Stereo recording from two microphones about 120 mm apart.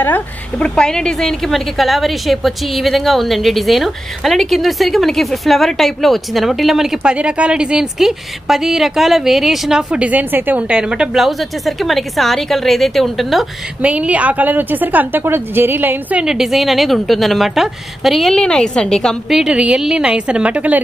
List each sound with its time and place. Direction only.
0.0 s speech: 10° left (ahead or behind)
13.8 s a woman's voice: 10° right (ahead or behind)